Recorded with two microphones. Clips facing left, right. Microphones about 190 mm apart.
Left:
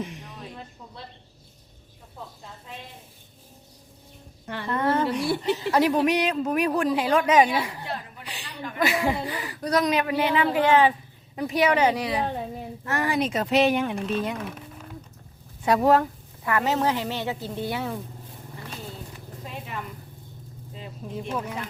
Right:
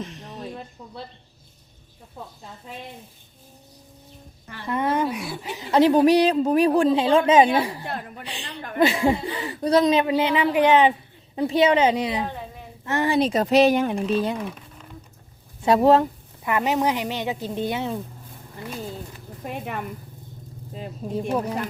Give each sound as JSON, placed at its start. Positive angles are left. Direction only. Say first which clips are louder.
{"t": 0.0, "sound": "a sound", "louder": "even", "side_deg": 10}
{"t": 4.7, "sound": "a woman's voice", "louder": "right 1 dB", "side_deg": -15}
{"t": 5.7, "sound": "speech", "louder": "right 7 dB", "side_deg": -30}
{"t": 15.6, "sound": "a woman's voice", "louder": "right 3 dB", "side_deg": -25}
{"t": 19.5, "sound": "speech", "louder": "right 6 dB", "side_deg": -55}